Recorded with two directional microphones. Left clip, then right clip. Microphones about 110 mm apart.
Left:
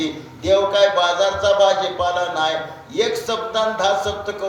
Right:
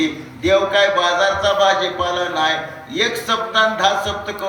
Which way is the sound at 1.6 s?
20° left (ahead or behind).